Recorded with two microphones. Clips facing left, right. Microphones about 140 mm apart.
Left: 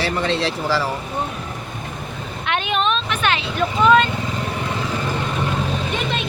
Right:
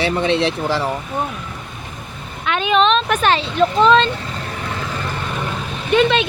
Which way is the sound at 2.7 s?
90° right.